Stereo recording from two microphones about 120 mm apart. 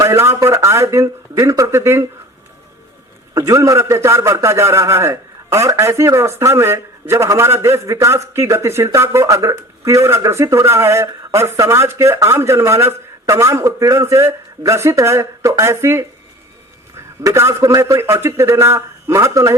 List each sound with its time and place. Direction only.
0.0 s a man's voice: 25° right (ahead or behind)
3.3 s a man's voice: 25° right (ahead or behind)
17.2 s a man's voice: 25° right (ahead or behind)